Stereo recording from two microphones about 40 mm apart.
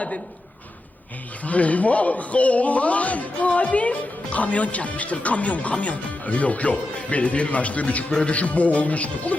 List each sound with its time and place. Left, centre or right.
1.5 s a man's voice: left